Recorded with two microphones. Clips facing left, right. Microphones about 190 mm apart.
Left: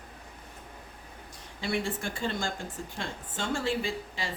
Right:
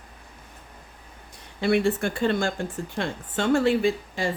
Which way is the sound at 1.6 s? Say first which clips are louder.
Right 10 dB; 65° right (ahead or behind).